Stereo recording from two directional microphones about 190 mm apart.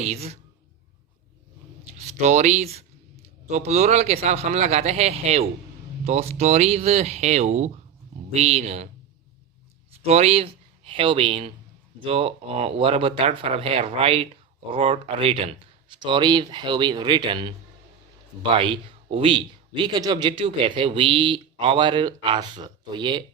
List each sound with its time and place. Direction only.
0.0 s speech: 35° right (ahead or behind)
2.2 s speech: 35° right (ahead or behind)
10.1 s speech: 35° right (ahead or behind)
18.5 s speech: 25° right (ahead or behind)